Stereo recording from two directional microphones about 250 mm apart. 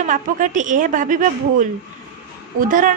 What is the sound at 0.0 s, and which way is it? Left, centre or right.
A woman's voice, right.